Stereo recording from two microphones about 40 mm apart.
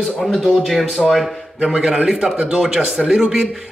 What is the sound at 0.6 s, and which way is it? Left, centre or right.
Speech, centre.